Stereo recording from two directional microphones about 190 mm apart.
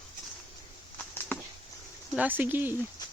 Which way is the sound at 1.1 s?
10° left (ahead or behind).